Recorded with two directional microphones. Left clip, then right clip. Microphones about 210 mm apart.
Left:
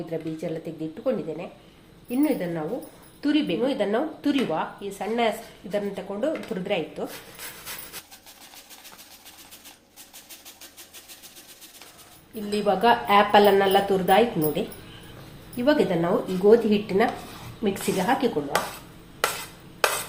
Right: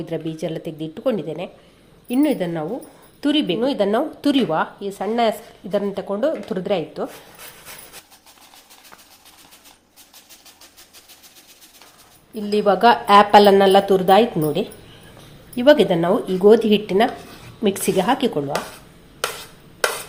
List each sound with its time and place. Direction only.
0.1 s speech: 45° right (ahead or behind)
12.3 s speech: 40° right (ahead or behind)